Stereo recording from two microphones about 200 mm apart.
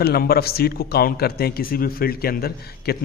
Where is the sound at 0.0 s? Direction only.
50° left (ahead or behind).